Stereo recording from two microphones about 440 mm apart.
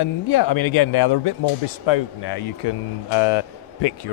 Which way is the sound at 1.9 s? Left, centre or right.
Left.